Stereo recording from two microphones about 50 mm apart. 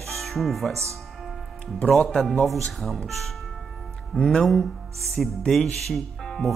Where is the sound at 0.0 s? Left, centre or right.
Centre.